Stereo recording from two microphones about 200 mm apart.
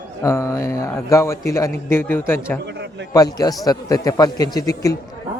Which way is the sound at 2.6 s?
60° right (ahead or behind).